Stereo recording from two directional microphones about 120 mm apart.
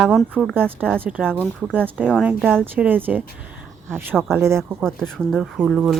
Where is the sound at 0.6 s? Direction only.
15° right (ahead or behind).